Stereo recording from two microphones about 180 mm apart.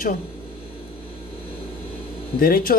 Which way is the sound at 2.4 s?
55° left (ahead or behind).